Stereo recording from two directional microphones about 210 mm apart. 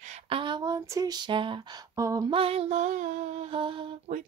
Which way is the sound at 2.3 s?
25° right (ahead or behind).